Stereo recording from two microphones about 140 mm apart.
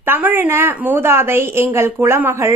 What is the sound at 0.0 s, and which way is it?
A woman's voice, 15° right (ahead or behind).